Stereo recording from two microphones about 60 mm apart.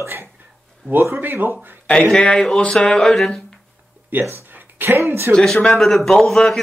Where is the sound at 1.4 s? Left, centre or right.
Right.